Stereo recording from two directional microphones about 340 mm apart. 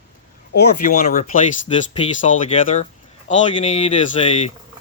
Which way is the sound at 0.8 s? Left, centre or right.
Left.